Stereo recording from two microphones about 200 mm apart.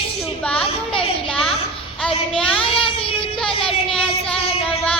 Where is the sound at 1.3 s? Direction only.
Centre (ahead or behind).